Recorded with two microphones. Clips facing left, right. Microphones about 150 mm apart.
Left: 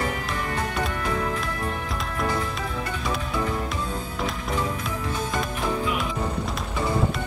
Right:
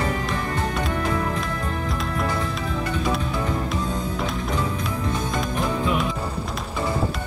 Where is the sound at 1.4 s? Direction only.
Centre (ahead or behind).